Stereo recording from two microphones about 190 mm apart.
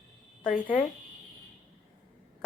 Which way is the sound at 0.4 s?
40° left (ahead or behind).